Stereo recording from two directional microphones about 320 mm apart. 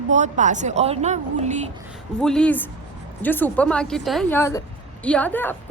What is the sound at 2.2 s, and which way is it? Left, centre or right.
Speech, centre.